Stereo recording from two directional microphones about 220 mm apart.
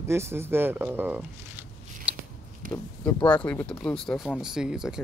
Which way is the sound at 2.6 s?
35° right (ahead or behind).